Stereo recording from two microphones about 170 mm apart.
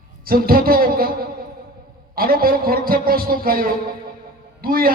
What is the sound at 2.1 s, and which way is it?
Speech, 60° right (ahead or behind).